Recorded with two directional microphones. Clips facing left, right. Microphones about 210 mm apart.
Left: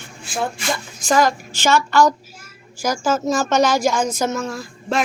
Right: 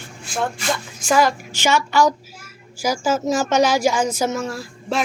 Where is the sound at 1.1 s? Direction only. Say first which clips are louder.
Even; 10° right (ahead or behind).